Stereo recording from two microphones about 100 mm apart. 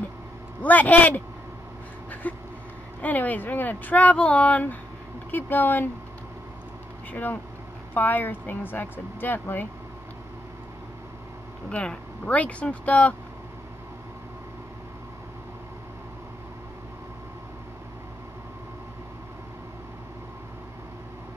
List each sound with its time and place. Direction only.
0.6 s speech: 15° left (ahead or behind)
2.2 s vehicle: 15° left (ahead or behind)
3.0 s speech: 15° left (ahead or behind)
7.1 s speech: 20° left (ahead or behind)
11.7 s speech: 10° left (ahead or behind)